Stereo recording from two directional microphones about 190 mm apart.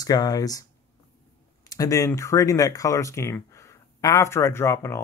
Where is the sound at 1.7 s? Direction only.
20° left (ahead or behind).